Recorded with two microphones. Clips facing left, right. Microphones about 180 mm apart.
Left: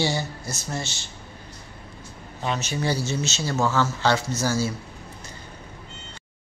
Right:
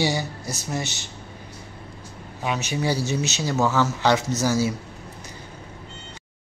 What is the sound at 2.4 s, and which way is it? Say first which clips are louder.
Speech: right 1 dB; 10° right (ahead or behind).